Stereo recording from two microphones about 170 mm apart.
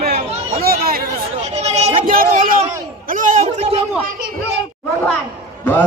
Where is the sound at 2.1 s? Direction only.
55° right (ahead or behind).